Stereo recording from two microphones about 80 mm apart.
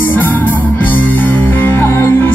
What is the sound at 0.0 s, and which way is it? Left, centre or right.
Music, left.